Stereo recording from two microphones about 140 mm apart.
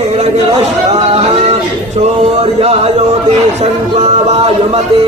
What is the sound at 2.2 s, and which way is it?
Speech, 45° right (ahead or behind).